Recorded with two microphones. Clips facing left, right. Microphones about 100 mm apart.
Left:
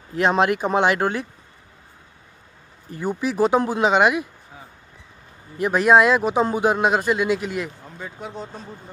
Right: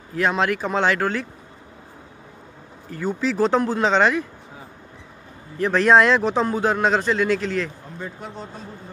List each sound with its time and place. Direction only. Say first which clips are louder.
0.1 s speech: left 2 dB; 20° left (ahead or behind)
2.9 s speech: right 1 dB; 15° left (ahead or behind)
5.6 s speech: even; 10° left (ahead or behind)
8.0 s a man's voice: left 1 dB; centre (ahead or behind)